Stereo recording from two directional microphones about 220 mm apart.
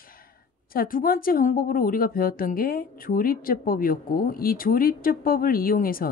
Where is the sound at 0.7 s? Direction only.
40° left (ahead or behind).